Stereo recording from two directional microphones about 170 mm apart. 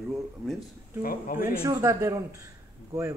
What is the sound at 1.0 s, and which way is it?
Speech, 55° left (ahead or behind).